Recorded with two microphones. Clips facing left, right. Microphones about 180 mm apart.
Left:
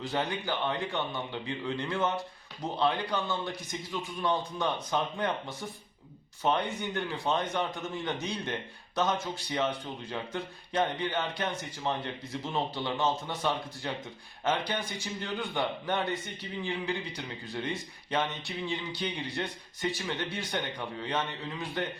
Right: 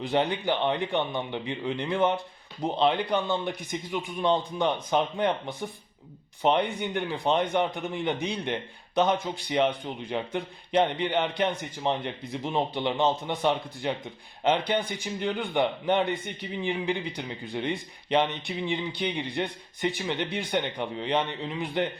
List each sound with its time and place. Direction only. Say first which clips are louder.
0.1 s a man's voice: right 7 dB; 20° right (ahead or behind)
14.8 s speech: right 6 dB; 55° right (ahead or behind)
15.0 s a man's voice: right 5 dB; 15° right (ahead or behind)